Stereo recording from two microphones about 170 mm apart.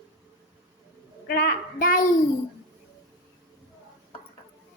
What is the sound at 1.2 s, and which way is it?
Child singing, 60° left (ahead or behind).